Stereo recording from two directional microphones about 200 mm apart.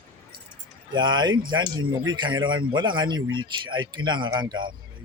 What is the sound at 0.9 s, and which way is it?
Speech, 20° right (ahead or behind).